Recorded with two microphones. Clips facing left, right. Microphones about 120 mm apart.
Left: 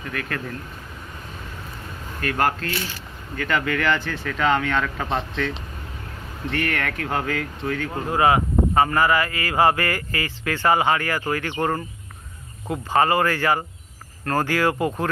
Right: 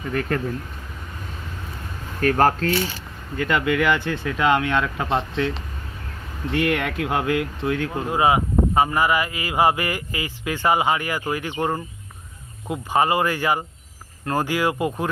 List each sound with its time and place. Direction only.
0.1 s speech: 35° right (ahead or behind)
2.3 s speech: 35° right (ahead or behind)
3.3 s speech: 15° right (ahead or behind)
6.5 s speech: 15° right (ahead or behind)
12.6 s speech: 15° right (ahead or behind)